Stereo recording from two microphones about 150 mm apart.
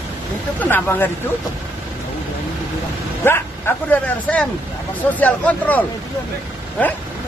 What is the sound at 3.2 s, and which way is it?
Speech, 15° left (ahead or behind).